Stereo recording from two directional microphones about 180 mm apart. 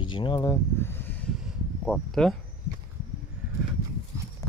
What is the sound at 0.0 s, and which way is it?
Speech, 25° left (ahead or behind).